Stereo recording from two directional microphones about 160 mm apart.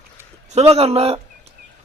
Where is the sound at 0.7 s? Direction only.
40° right (ahead or behind).